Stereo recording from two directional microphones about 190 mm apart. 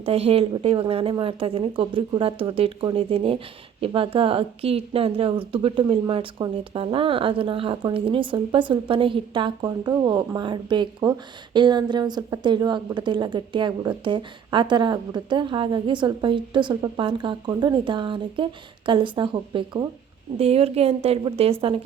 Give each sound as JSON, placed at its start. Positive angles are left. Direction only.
{"t": 0.0, "sound": "a woman's voice", "side_deg": -30}